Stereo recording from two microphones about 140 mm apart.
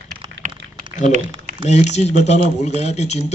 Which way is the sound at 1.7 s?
55° left (ahead or behind).